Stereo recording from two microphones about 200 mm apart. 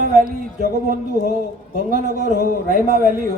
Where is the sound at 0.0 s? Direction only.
45° right (ahead or behind).